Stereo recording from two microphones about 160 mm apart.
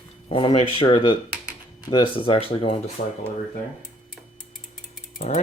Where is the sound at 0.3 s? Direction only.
35° left (ahead or behind).